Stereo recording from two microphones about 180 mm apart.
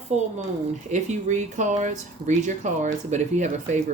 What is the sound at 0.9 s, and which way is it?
Speech, 40° right (ahead or behind).